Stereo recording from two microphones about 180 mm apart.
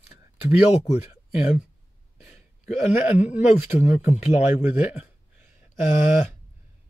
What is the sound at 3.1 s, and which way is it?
Speech, 40° left (ahead or behind).